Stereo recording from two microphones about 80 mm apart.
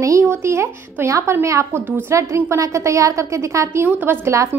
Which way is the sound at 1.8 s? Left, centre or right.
Right.